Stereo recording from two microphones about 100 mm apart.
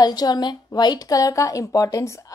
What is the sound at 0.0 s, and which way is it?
A woman's voice, 40° left (ahead or behind).